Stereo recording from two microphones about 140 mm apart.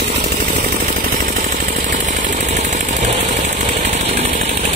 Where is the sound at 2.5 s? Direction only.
60° right (ahead or behind).